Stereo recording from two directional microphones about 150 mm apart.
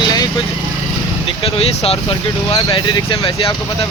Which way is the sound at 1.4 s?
40° left (ahead or behind).